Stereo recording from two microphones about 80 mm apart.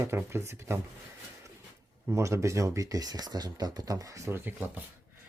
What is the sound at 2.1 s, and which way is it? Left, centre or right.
Speech, right.